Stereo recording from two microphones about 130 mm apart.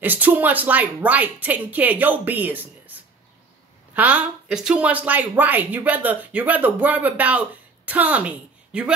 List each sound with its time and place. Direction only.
0.0 s speech: 15° right (ahead or behind)